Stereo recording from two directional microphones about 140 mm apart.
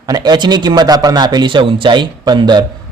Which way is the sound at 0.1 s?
30° right (ahead or behind).